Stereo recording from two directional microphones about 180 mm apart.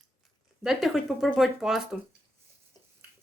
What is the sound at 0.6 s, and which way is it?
Speech, centre (ahead or behind).